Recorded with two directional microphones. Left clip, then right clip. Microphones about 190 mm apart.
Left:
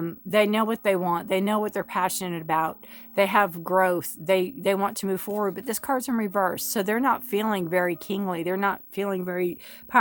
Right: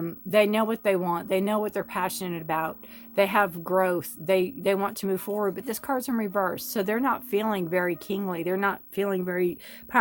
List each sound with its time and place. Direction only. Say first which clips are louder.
0.0 s a woman's voice: even; 25° left (ahead or behind)